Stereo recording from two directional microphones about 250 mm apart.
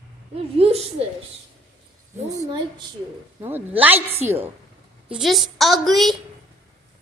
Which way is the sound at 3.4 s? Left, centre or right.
Centre.